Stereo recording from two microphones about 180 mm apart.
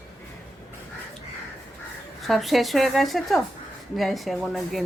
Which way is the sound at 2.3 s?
Centre (ahead or behind).